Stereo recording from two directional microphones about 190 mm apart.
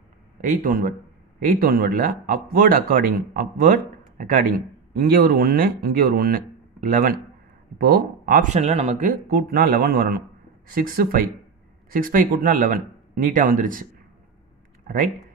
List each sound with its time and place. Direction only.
0.4 s speech: 45° right (ahead or behind)
9.5 s speech: 55° right (ahead or behind)